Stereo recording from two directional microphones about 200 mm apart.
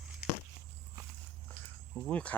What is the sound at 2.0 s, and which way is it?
Speech, 5° left (ahead or behind).